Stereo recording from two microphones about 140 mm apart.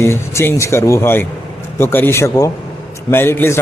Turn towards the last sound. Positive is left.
turn(degrees=15)  # may be behind; listen again after turning